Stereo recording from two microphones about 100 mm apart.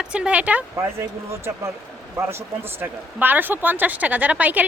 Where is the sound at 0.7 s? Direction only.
25° right (ahead or behind).